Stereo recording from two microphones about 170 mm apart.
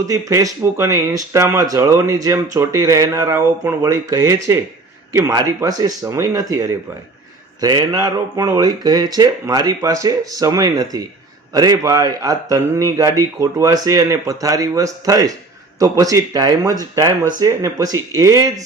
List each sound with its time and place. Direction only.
0.1 s speech: 20° right (ahead or behind)